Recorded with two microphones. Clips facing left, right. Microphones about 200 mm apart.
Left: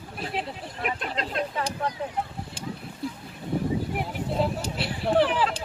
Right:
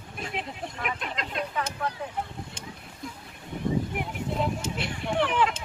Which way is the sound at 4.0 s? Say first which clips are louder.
Left 3 dB; 35° left (ahead or behind).